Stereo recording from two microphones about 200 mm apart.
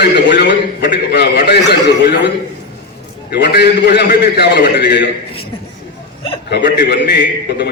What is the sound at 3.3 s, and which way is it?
A man's voice, 55° left (ahead or behind).